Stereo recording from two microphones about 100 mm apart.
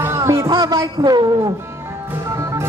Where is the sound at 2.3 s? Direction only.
30° right (ahead or behind).